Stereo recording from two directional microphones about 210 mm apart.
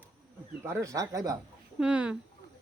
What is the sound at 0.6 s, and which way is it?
Speech, 15° right (ahead or behind).